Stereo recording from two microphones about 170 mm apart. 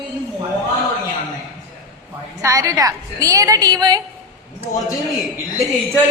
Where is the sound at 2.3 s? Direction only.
20° right (ahead or behind).